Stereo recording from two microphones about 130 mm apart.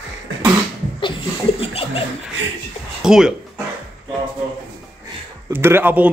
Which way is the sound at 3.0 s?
5° right (ahead or behind).